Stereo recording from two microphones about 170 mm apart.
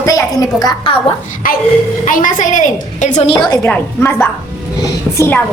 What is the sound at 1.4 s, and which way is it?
A woman's voice, 55° left (ahead or behind).